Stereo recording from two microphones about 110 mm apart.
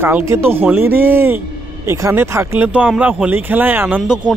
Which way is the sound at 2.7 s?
15° right (ahead or behind).